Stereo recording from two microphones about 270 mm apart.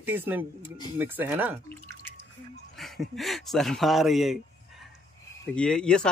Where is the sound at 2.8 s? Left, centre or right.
Centre.